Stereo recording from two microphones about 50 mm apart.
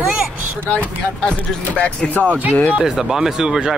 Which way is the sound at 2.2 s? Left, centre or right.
Right.